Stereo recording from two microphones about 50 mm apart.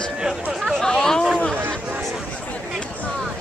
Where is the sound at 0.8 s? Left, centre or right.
Centre.